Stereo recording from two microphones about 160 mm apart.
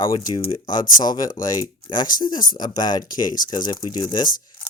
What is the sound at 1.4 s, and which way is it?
Speech, 55° left (ahead or behind).